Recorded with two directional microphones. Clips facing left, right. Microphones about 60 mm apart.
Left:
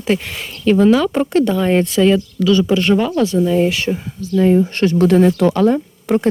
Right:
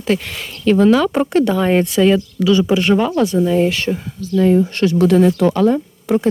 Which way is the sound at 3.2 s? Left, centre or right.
Right.